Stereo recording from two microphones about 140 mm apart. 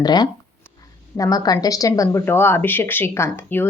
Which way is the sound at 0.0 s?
30° left (ahead or behind).